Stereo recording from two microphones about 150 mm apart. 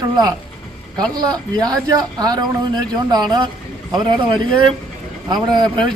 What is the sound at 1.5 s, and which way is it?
A man's voice, 25° right (ahead or behind).